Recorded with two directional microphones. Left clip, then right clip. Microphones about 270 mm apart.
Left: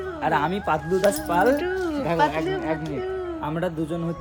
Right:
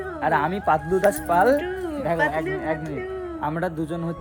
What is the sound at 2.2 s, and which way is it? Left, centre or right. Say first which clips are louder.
A woman's voice: left 3 dB; centre.